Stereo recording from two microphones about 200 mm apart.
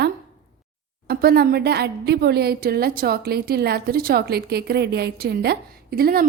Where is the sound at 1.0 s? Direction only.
50° right (ahead or behind).